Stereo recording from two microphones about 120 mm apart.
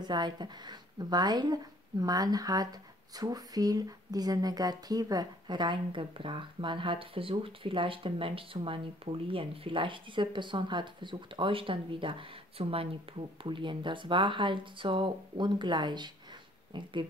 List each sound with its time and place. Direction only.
0.0 s speech: 35° right (ahead or behind)